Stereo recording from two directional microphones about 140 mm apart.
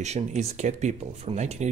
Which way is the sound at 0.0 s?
50° right (ahead or behind).